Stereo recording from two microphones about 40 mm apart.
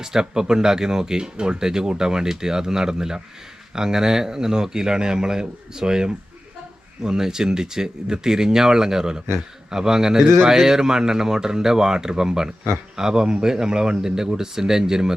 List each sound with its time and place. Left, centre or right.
0.0 s speech: centre